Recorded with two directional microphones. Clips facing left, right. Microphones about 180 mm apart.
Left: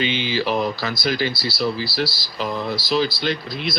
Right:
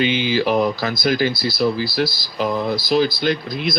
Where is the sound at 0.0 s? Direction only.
50° right (ahead or behind).